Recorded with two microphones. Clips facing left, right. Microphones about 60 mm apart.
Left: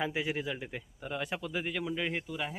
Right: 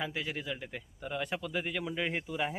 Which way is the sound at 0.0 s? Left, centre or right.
Centre.